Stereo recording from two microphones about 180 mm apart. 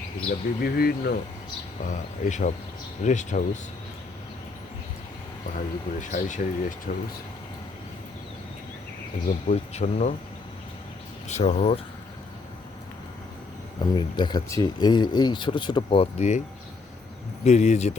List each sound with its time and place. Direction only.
0.6 s speech: 60° left (ahead or behind)
1.9 s speech: 45° left (ahead or behind)
5.5 s speech: 45° left (ahead or behind)
9.2 s speech: 40° left (ahead or behind)
11.3 s speech: 40° left (ahead or behind)
13.8 s speech: 25° left (ahead or behind)
17.4 s speech: 40° left (ahead or behind)